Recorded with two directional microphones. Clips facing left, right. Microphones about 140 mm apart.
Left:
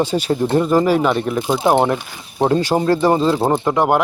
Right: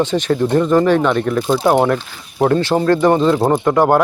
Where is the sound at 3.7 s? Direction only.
25° left (ahead or behind).